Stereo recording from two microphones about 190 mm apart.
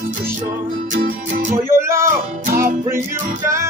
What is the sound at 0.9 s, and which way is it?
Music, 45° right (ahead or behind).